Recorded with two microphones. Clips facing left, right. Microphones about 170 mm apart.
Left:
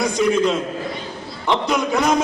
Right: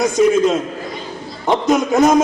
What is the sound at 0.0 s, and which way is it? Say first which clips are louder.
A man's voice: right 4 dB; 45° right (ahead or behind).